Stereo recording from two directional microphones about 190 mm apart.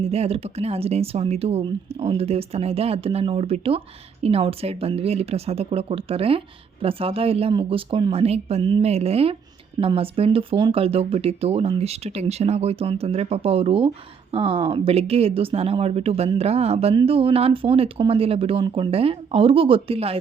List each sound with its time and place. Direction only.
0.0 s speech: 30° right (ahead or behind)